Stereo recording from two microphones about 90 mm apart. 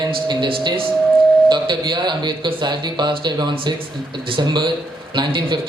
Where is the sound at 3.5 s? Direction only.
80° right; by 5.5 s 55° right (ahead or behind).